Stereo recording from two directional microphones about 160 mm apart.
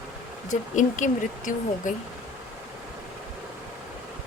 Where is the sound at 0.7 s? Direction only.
50° left (ahead or behind).